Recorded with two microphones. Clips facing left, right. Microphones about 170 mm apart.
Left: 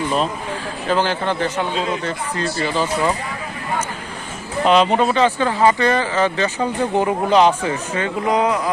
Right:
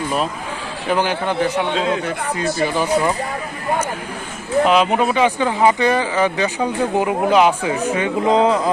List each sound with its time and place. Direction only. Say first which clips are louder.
0.9 s speech: even; 15° right (ahead or behind)
4.6 s speech: left 2 dB; 5° right (ahead or behind)
8.3 s speech: right 3 dB; 25° right (ahead or behind)